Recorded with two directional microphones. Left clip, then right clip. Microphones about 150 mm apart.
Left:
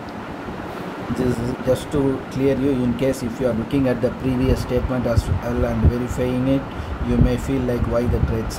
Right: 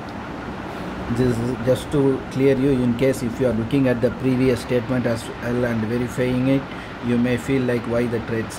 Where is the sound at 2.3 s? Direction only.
20° right (ahead or behind).